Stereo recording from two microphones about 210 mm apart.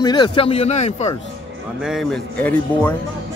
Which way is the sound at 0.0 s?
20° left (ahead or behind).